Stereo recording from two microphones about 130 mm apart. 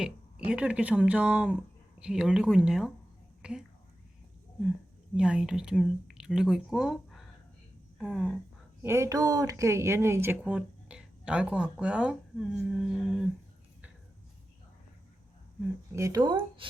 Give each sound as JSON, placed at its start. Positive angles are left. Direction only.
{"t": 0.0, "sound": "speech", "side_deg": -10}
{"t": 5.1, "sound": "speech", "side_deg": -5}
{"t": 8.8, "sound": "speech", "side_deg": -20}
{"t": 10.4, "sound": "speech", "side_deg": -10}
{"t": 15.9, "sound": "speech", "side_deg": -25}